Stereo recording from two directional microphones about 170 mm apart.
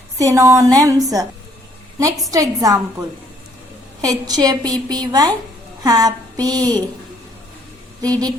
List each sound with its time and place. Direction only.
0.2 s a woman's voice: 20° right (ahead or behind)
2.3 s a woman's voice: 20° right (ahead or behind)
8.0 s a woman's voice: 20° right (ahead or behind)